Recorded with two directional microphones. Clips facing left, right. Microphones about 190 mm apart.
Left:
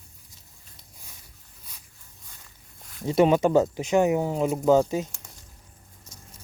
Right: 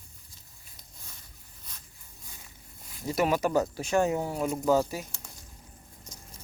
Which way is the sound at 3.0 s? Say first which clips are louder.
Left 7 dB; 25° left (ahead or behind).